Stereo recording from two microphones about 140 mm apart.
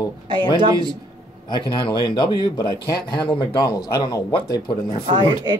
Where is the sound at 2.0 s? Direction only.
30° left (ahead or behind).